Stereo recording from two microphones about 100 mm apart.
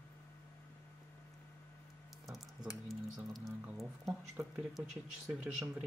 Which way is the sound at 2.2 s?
Centre (ahead or behind).